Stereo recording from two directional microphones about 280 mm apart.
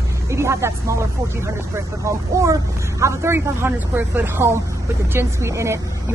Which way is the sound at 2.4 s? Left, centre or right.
Centre.